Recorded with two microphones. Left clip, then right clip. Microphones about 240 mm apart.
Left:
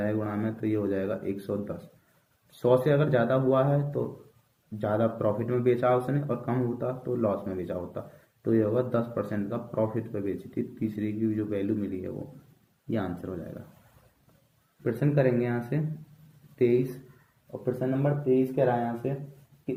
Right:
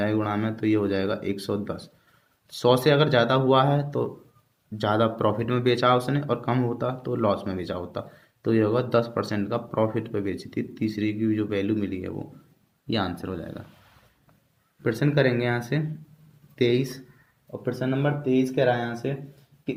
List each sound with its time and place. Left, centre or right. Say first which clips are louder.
0.0 s speech: right 5 dB; right
14.8 s speech: right 3 dB; right